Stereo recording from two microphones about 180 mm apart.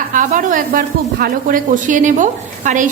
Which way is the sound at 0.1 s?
50° right (ahead or behind).